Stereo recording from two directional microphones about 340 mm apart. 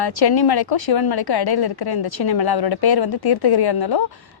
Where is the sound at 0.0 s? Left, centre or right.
Left.